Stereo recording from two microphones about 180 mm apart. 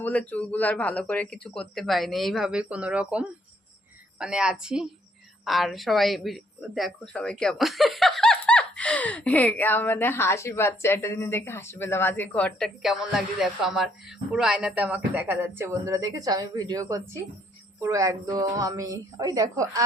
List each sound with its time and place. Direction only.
0.0 s speech: 10° left (ahead or behind); by 19.8 s 20° right (ahead or behind)